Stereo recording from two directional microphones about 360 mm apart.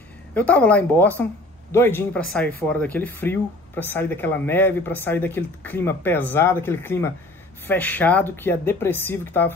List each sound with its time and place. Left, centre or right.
0.3 s a man's voice: centre